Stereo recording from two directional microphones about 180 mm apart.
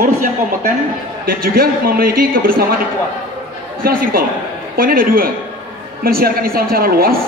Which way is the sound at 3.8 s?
55° right (ahead or behind).